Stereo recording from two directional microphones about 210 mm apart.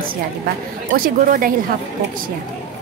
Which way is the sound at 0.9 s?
40° right (ahead or behind).